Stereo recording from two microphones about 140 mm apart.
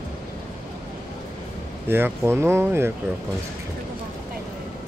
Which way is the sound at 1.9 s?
15° right (ahead or behind).